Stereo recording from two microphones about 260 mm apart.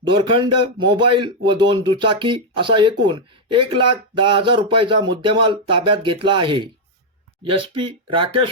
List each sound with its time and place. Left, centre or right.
0.1 s a man's voice: centre